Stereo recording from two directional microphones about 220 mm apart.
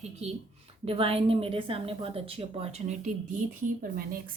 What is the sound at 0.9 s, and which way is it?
A woman's voice, 25° right (ahead or behind).